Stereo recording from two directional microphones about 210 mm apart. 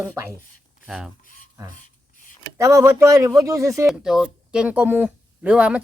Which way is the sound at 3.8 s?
Centre (ahead or behind).